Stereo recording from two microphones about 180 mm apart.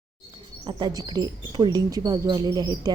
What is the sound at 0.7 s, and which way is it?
Speech, 25° right (ahead or behind).